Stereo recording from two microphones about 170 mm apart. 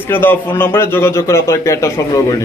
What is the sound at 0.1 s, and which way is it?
A man's voice, 10° left (ahead or behind).